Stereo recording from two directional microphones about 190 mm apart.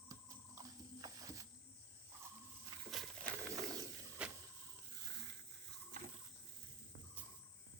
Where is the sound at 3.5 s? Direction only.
15° right (ahead or behind).